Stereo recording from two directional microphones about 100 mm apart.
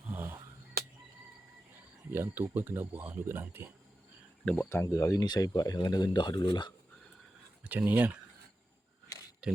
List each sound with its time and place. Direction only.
0.1 s a sound: 20° right (ahead or behind)
2.0 s speech: 20° right (ahead or behind)
4.7 s speech: 30° left (ahead or behind); by 6.7 s 50° left (ahead or behind)
7.6 s speech: 15° right (ahead or behind)
9.4 s speech: 10° right (ahead or behind)